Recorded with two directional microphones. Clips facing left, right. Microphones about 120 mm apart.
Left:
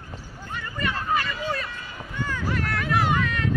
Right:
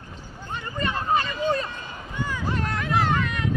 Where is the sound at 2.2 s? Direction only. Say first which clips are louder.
Even; 15° right (ahead or behind).